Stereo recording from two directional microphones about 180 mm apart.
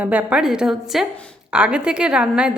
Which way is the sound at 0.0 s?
5° right (ahead or behind).